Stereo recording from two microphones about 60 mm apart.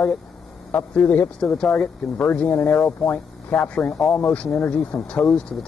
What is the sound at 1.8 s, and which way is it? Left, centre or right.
Speech, centre.